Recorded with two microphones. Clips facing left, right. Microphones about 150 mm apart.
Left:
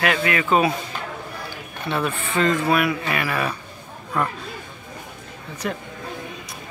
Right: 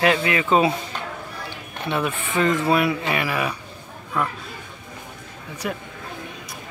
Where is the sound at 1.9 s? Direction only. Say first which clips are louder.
Even; 15° right (ahead or behind).